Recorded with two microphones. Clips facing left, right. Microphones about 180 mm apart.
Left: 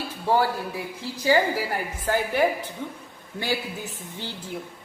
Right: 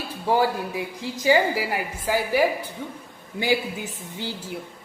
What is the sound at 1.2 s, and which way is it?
A woman's voice, 15° right (ahead or behind).